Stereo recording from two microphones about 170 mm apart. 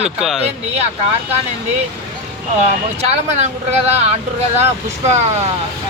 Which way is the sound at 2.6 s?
40° right (ahead or behind).